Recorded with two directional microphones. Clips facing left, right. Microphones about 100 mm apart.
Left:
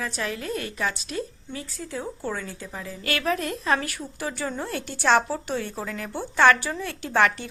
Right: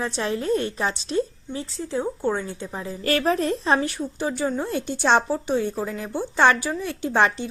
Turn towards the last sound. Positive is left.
turn(degrees=-20)  # may be behind; listen again after turning